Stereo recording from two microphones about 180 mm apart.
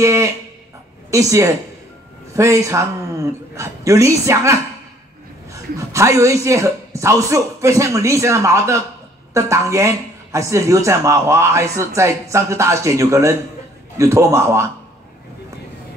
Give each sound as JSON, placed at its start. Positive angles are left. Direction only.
{"t": 0.0, "sound": "speech", "side_deg": -15}